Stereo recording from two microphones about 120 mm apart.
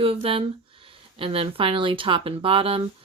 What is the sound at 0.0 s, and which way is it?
Speech, 50° right (ahead or behind).